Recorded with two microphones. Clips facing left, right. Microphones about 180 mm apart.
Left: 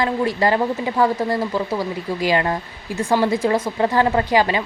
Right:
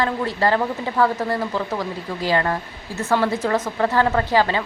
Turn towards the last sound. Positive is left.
turn(degrees=15)  # may be behind; listen again after turning